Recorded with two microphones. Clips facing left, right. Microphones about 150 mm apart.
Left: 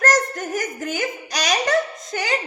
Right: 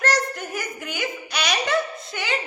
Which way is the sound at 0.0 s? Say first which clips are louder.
Left 3 dB; 45° left (ahead or behind).